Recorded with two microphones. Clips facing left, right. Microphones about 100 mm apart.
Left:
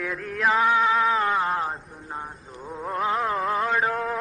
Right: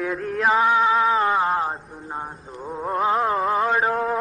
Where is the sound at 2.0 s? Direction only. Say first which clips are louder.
Right 3 dB; 25° right (ahead or behind).